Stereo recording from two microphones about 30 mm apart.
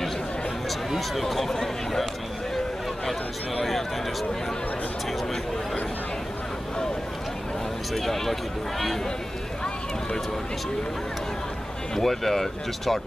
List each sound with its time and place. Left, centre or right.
0.7 s a sound: centre
1.2 s speech: centre
3.6 s speech: centre
7.9 s speech: centre
12.0 s speech: centre